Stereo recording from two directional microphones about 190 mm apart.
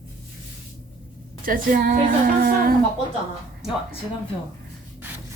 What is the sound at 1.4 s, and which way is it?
Speech, 45° right (ahead or behind).